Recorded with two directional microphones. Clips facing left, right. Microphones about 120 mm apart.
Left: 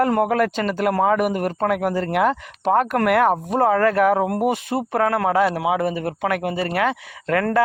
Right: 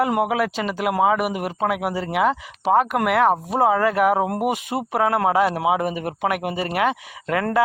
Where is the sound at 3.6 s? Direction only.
10° right (ahead or behind).